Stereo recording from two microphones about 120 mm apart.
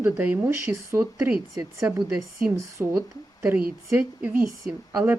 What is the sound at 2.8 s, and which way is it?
Speech, 15° right (ahead or behind).